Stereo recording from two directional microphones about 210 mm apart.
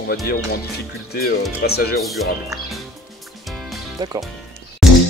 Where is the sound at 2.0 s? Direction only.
Centre (ahead or behind).